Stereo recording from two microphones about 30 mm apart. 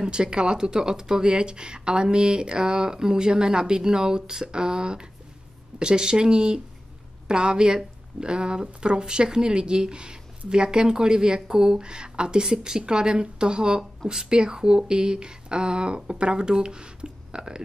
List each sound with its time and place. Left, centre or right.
0.0 s speech: right